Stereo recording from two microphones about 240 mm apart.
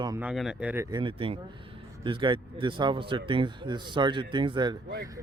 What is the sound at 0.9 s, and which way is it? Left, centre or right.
Speech, right.